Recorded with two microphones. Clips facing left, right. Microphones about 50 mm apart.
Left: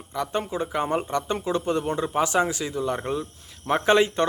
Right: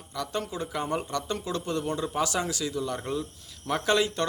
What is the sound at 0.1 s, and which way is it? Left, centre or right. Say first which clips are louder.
Speech: left 5 dB; left.